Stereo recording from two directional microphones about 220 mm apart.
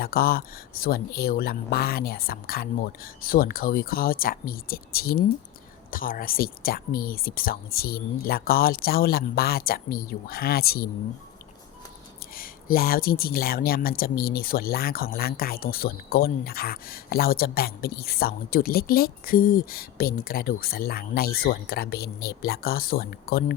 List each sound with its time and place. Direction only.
0.0 s speech: 45° left (ahead or behind)
12.4 s speech: 40° left (ahead or behind)